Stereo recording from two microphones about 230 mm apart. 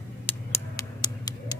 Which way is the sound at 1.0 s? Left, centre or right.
Centre.